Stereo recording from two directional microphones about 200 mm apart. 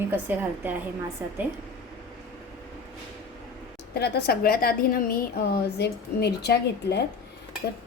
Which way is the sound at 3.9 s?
50° left (ahead or behind).